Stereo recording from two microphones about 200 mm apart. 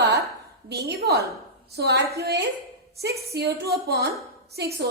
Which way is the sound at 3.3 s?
55° right (ahead or behind).